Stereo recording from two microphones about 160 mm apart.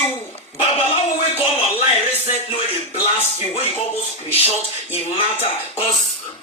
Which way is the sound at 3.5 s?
40° left (ahead or behind).